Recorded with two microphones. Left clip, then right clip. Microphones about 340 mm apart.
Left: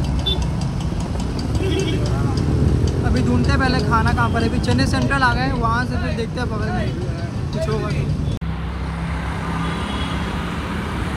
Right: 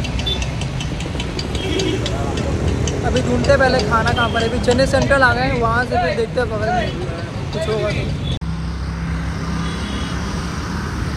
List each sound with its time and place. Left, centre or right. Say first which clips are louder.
3.4 s speech: right 10 dB; centre